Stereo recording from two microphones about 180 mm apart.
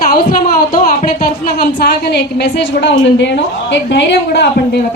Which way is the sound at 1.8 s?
70° left (ahead or behind).